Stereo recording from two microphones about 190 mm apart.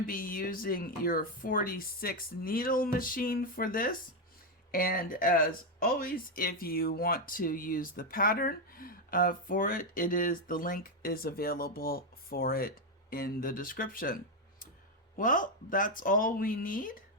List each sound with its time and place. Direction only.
0.0 s speech: 50° left (ahead or behind)
15.2 s speech: 45° left (ahead or behind)